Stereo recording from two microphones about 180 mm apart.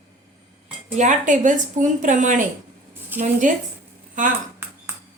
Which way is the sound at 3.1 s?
10° right (ahead or behind).